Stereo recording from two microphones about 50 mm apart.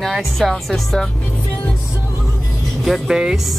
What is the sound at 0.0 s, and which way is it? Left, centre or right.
Speech, centre.